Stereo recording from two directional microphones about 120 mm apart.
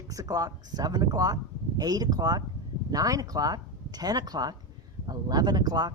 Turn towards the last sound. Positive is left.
turn(degrees=-35)  # may be behind; listen again after turning